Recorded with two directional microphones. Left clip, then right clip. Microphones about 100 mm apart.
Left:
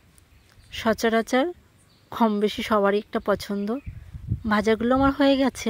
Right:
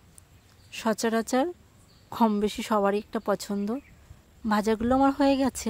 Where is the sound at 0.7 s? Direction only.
15° left (ahead or behind).